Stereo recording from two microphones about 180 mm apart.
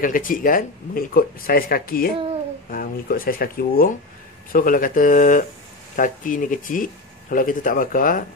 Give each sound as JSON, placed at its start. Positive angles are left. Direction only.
{"t": 0.0, "sound": "speech", "side_deg": 50}